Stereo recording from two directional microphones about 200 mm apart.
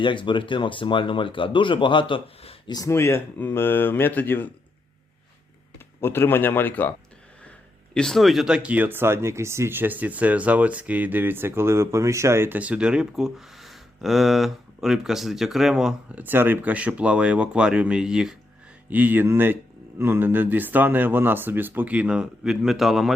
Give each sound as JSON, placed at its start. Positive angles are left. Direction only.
{"t": 0.0, "sound": "speech", "side_deg": 25}
{"t": 6.0, "sound": "a man's voice", "side_deg": 10}
{"t": 7.9, "sound": "speech", "side_deg": 0}